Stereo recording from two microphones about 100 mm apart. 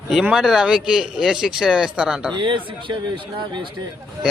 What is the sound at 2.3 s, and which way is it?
Speech, 55° right (ahead or behind).